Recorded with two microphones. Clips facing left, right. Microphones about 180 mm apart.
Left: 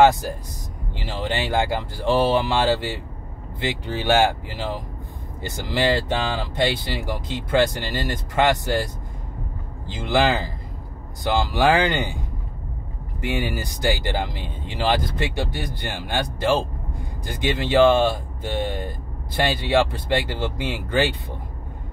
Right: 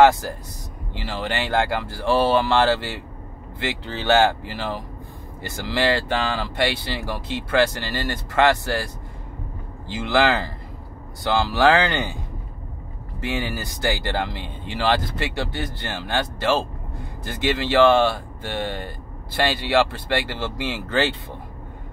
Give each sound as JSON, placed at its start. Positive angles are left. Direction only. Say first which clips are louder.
{"t": 0.9, "sound": "speech", "louder": "even", "side_deg": 20}
{"t": 13.2, "sound": "speech", "louder": "left 1 dB", "side_deg": 15}